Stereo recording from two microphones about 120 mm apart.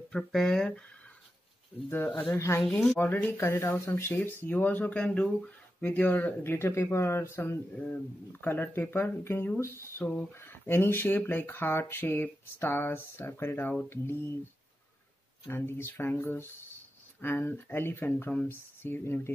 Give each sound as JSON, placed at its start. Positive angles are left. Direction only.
{"t": 0.1, "sound": "speech", "side_deg": 5}
{"t": 1.9, "sound": "speech", "side_deg": 15}
{"t": 2.6, "sound": "speech", "side_deg": 5}
{"t": 15.4, "sound": "speech", "side_deg": 20}